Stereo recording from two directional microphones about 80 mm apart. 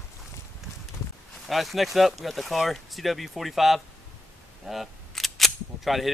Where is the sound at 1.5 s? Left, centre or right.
Centre.